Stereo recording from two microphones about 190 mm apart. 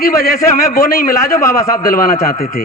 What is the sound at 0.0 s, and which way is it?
A man's voice, 50° left (ahead or behind).